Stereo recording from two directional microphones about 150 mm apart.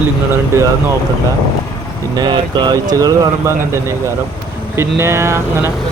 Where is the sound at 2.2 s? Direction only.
30° right (ahead or behind).